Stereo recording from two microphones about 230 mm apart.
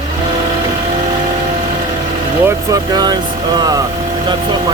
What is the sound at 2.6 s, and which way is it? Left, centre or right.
Speech, centre.